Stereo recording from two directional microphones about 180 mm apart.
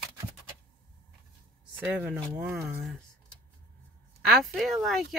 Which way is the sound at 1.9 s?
10° right (ahead or behind).